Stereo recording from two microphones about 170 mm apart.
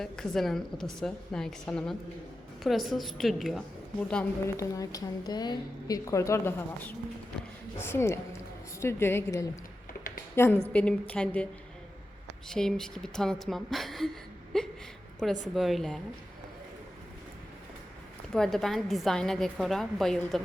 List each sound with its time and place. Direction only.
0.0 s a woman's voice: centre (ahead or behind)
4.5 s a woman's voice: 20° left (ahead or behind)
12.5 s a woman's voice: 5° left (ahead or behind)
18.3 s a woman's voice: centre (ahead or behind)